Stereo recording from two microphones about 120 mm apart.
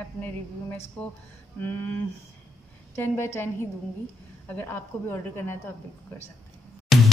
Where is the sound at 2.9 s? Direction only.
20° left (ahead or behind).